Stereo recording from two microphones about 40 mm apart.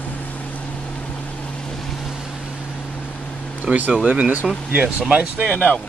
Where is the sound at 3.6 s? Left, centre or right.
Right.